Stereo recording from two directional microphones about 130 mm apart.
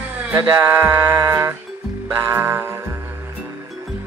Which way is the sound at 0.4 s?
25° right (ahead or behind).